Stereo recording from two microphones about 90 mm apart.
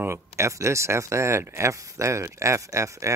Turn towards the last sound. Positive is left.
turn(degrees=-35)  # may be behind; listen again after turning